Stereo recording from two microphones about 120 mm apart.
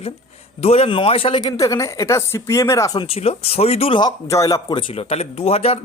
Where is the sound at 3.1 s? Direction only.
55° left (ahead or behind).